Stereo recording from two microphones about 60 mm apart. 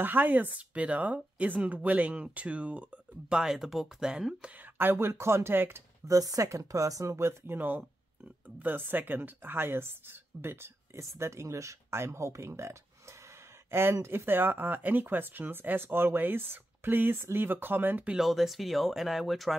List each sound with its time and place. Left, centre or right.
0.0 s speech: right
3.3 s speech: centre
4.7 s speech: right
6.0 s speech: right
7.5 s a woman's voice: right
18.1 s speech: centre